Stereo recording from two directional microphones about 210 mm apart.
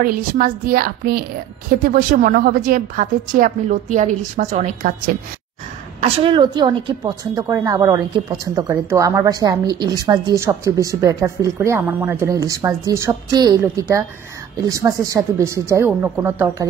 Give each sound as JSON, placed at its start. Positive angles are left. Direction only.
{"t": 0.0, "sound": "a woman's voice", "side_deg": -45}